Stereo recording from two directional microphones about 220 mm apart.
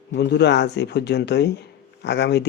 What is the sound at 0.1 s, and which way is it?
Speech, 50° left (ahead or behind).